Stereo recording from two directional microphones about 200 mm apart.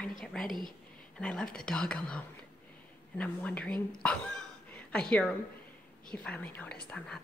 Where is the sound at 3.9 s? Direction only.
5° left (ahead or behind).